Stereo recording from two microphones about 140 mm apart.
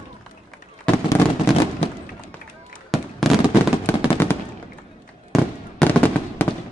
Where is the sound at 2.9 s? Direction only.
Centre (ahead or behind).